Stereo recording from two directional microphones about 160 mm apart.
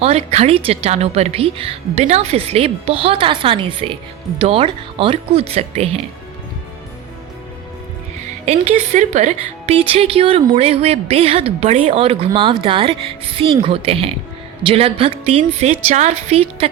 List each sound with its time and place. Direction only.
0.0 s a woman's voice: 40° right (ahead or behind)
8.4 s a woman's voice: 45° right (ahead or behind)